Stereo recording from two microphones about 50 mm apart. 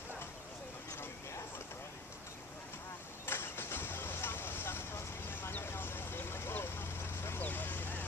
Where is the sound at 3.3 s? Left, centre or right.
Left.